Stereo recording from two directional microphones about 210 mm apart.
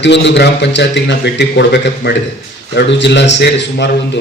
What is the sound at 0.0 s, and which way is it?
A man's voice, 55° left (ahead or behind).